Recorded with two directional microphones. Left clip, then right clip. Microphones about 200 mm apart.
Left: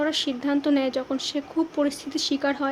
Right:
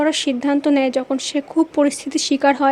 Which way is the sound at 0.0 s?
40° right (ahead or behind).